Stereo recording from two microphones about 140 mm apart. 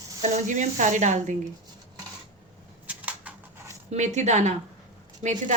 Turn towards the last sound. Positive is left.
turn(degrees=-60)  # may be behind; listen again after turning